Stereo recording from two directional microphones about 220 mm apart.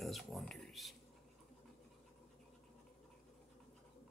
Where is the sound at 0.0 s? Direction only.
Centre (ahead or behind).